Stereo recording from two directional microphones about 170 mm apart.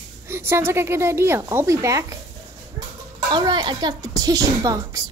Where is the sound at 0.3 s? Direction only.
15° right (ahead or behind).